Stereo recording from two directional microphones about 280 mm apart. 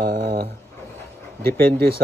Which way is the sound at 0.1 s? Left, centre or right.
Right.